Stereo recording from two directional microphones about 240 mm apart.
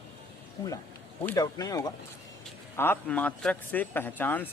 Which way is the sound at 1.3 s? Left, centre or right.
Centre.